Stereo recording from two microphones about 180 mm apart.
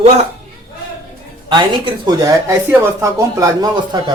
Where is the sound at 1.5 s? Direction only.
25° right (ahead or behind).